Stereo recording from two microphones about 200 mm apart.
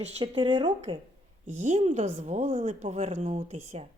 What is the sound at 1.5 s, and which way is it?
A woman's voice, 35° right (ahead or behind).